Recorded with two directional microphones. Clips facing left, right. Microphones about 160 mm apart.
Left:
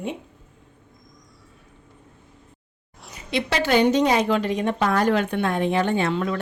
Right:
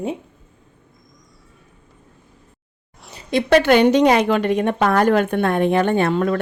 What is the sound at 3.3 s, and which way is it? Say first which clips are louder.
A woman's voice: right 7 dB; 50° right (ahead or behind).